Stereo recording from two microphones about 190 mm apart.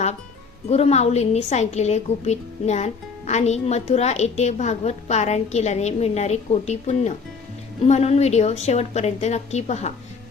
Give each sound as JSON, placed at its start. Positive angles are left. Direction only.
{"t": 0.7, "sound": "a woman's voice", "side_deg": 35}